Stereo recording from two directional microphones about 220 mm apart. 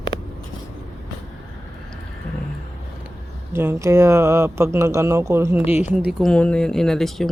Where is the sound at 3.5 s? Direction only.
10° right (ahead or behind).